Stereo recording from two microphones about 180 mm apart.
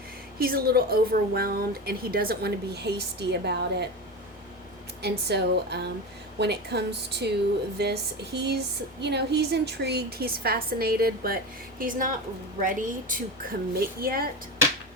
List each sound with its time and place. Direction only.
0.3 s speech: 55° right (ahead or behind)
5.0 s a woman's voice: 65° right (ahead or behind)